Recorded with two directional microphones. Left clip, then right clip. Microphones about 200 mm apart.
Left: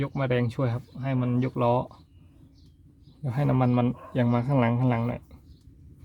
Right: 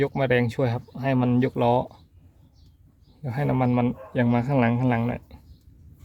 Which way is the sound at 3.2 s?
Centre (ahead or behind).